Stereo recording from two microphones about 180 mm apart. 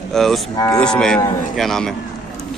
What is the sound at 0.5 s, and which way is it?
Speech, 20° left (ahead or behind).